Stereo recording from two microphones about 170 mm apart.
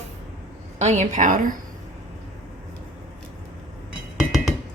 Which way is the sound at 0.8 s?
45° right (ahead or behind).